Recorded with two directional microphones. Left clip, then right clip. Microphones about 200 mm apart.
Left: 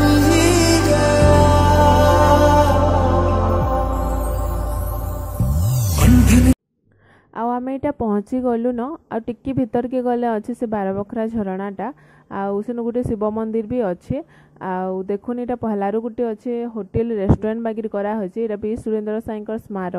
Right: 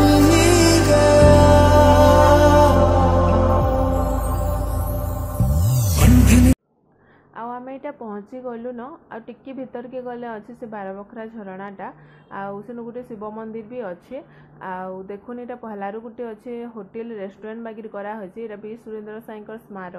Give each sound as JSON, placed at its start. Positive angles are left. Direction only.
{"t": 0.0, "sound": "music", "side_deg": 0}
{"t": 7.3, "sound": "a woman's voice", "side_deg": 50}